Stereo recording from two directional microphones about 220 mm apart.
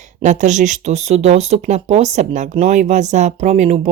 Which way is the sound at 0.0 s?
35° right (ahead or behind).